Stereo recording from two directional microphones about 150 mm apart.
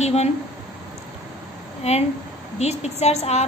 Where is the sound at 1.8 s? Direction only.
45° left (ahead or behind).